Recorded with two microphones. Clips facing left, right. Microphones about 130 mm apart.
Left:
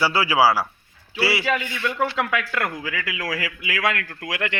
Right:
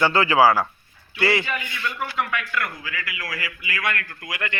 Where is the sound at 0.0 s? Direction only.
10° left (ahead or behind).